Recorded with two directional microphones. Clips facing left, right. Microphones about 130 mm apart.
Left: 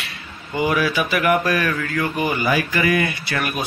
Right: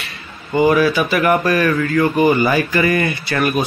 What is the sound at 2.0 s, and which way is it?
Speech, 45° right (ahead or behind).